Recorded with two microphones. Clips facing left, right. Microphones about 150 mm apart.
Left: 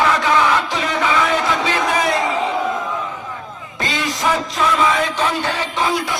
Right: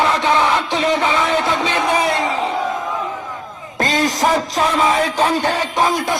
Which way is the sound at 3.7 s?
40° right (ahead or behind).